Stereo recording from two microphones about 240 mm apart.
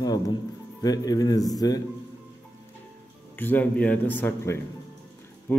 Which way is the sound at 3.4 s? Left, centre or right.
Centre.